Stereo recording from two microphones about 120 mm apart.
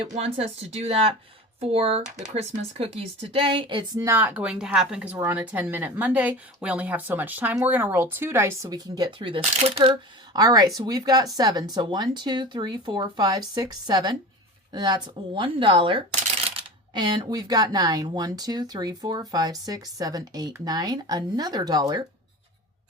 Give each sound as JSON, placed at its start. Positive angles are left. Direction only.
{"t": 0.1, "sound": "speech", "side_deg": -60}
{"t": 3.9, "sound": "speech", "side_deg": -25}
{"t": 4.2, "sound": "speech", "side_deg": -15}
{"t": 5.1, "sound": "speech", "side_deg": -15}
{"t": 9.4, "sound": "speech", "side_deg": -60}
{"t": 9.9, "sound": "speech", "side_deg": -30}